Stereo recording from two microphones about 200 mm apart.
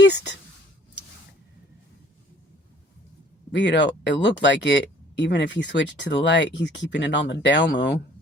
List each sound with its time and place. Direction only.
3.5 s speech: 60° left (ahead or behind)